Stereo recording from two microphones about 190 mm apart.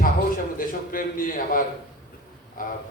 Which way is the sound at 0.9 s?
45° left (ahead or behind).